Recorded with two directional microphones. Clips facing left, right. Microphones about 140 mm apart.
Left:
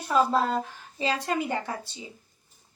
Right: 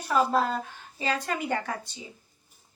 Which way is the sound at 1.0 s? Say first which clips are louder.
Left 2 dB; 30° left (ahead or behind).